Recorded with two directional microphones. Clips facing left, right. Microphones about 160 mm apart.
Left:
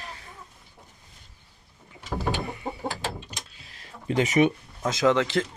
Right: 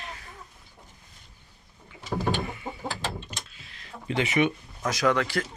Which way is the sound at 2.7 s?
35° left (ahead or behind).